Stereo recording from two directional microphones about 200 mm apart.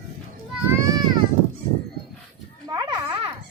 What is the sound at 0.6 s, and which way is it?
Children playing, 15° right (ahead or behind).